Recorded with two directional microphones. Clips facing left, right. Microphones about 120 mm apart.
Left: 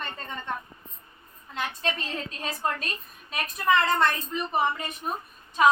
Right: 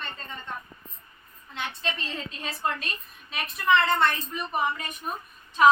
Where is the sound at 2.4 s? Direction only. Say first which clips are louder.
Even; 35° left (ahead or behind).